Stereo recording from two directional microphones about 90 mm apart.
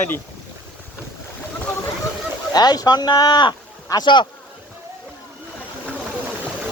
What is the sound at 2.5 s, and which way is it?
Speech, 45° left (ahead or behind).